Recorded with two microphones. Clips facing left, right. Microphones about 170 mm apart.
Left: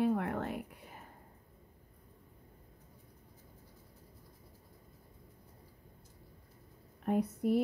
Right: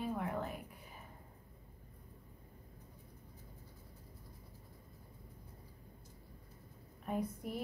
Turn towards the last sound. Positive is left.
turn(degrees=65)  # may be behind; listen again after turning